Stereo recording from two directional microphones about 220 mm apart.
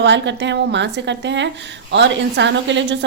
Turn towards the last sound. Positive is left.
turn(degrees=-55)  # may be behind; listen again after turning